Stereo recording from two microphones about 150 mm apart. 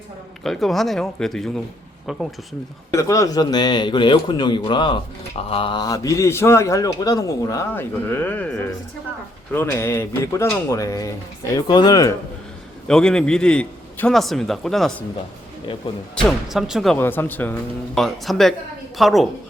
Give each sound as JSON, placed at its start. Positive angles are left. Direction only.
{"t": 0.4, "sound": "a man's voice", "side_deg": 0}
{"t": 2.9, "sound": "a man's voice", "side_deg": 20}
{"t": 12.9, "sound": "a man's voice", "side_deg": 5}
{"t": 16.1, "sound": "a man's voice", "side_deg": -5}
{"t": 17.0, "sound": "a man's voice", "side_deg": 15}